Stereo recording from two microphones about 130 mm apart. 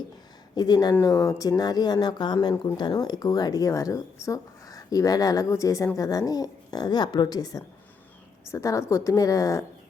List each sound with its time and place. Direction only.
0.5 s speech: 30° left (ahead or behind)